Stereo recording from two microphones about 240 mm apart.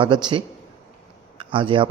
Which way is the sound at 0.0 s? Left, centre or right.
Centre.